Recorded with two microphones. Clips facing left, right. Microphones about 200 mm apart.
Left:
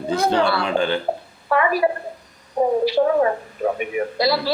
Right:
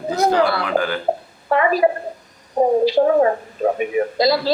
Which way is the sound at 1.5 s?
25° right (ahead or behind).